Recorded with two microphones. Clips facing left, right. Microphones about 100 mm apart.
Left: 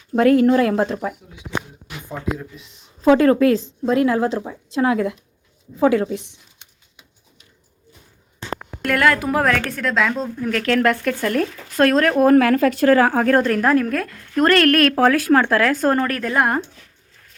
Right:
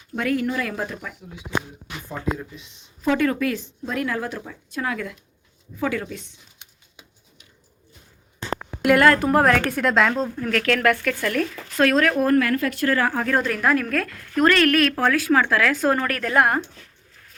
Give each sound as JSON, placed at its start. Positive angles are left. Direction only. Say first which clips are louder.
{"t": 0.1, "sound": "speech", "louder": "left 10 dB", "side_deg": 35}
{"t": 2.1, "sound": "a woman's voice", "louder": "left 1 dB", "side_deg": 0}
{"t": 3.2, "sound": "a woman's voice", "louder": "left 8 dB", "side_deg": 35}
{"t": 8.8, "sound": "a woman's voice", "louder": "right 2 dB", "side_deg": -5}
{"t": 10.6, "sound": "speech", "louder": "left 3 dB", "side_deg": 25}
{"t": 12.2, "sound": "speech", "louder": "left 6 dB", "side_deg": 90}
{"t": 13.4, "sound": "speech", "louder": "left 4 dB", "side_deg": 35}
{"t": 13.9, "sound": "a woman's voice", "louder": "left 2 dB", "side_deg": 20}
{"t": 14.4, "sound": "a woman's voice", "louder": "left 3 dB", "side_deg": 55}